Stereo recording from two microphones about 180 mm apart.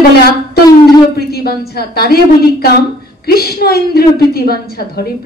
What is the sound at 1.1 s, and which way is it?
A woman's voice, 60° left (ahead or behind).